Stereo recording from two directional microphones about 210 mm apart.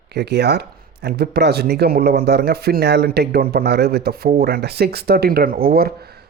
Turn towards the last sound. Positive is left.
turn(degrees=-45)  # may be behind; listen again after turning